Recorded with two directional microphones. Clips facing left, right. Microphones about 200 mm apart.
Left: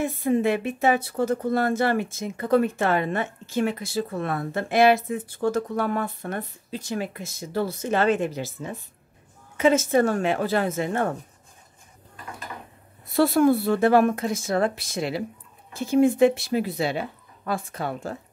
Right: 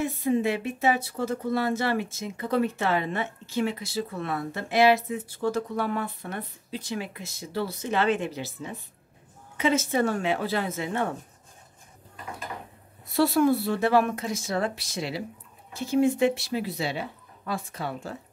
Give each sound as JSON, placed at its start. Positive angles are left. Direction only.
{"t": 0.0, "sound": "speech", "side_deg": 55}
{"t": 13.1, "sound": "speech", "side_deg": 55}